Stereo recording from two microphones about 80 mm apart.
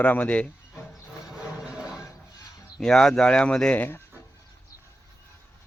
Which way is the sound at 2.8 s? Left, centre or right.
Centre.